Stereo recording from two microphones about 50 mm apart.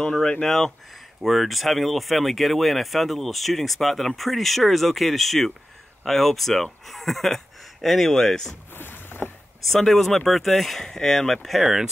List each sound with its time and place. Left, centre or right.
0.0 s speech: centre
8.7 s boat: left
9.7 s speech: centre